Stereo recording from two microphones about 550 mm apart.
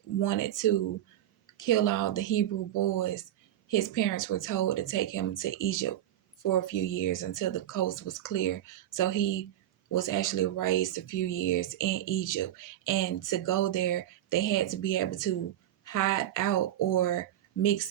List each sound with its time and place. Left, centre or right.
0.2 s speech: left